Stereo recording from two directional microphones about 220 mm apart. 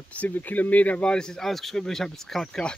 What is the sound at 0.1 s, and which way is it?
Speech, 5° left (ahead or behind).